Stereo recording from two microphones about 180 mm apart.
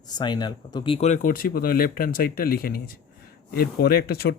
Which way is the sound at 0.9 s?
40° left (ahead or behind).